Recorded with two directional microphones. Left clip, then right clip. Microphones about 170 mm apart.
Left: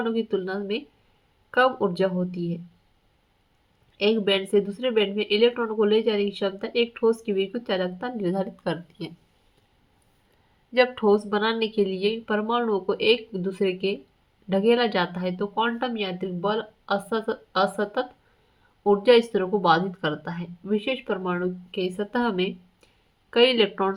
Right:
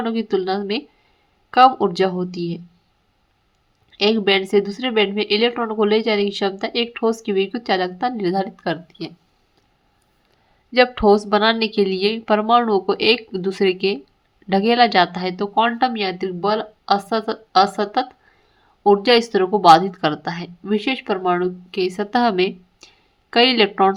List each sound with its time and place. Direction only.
0.0 s speech: 45° right (ahead or behind)
3.9 s speech: 45° right (ahead or behind); by 9.1 s 30° right (ahead or behind)
10.7 s speech: 40° right (ahead or behind)